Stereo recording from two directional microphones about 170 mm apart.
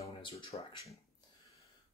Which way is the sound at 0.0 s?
30° left (ahead or behind).